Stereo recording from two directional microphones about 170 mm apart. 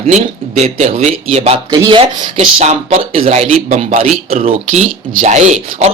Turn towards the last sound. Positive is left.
turn(degrees=-45)  # may be behind; listen again after turning